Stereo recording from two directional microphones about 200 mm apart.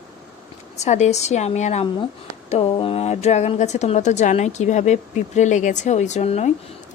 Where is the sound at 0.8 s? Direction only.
35° left (ahead or behind).